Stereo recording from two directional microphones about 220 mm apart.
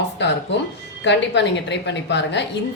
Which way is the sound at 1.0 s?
50° left (ahead or behind).